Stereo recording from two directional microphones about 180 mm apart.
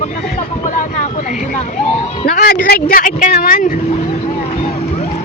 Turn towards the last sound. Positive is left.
turn(degrees=50)  # may be behind; listen again after turning